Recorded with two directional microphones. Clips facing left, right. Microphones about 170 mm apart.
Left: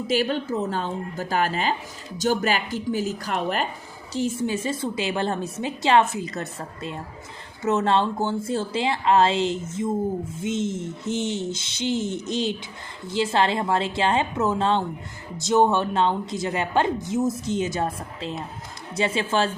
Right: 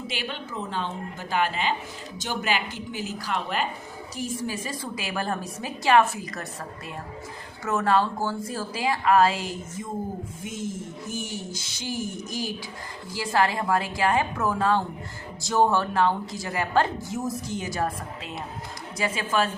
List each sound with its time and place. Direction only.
0.1 s a woman's voice: 40° left (ahead or behind)
4.1 s a woman's voice: 25° left (ahead or behind)